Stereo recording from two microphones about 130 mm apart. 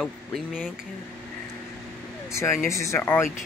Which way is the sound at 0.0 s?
Centre (ahead or behind).